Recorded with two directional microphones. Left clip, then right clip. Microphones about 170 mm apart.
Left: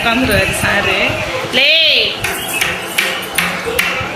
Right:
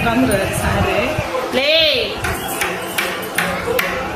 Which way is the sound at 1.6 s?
10° right (ahead or behind).